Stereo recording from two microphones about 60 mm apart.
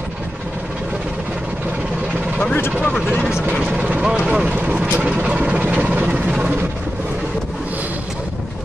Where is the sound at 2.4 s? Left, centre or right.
Left.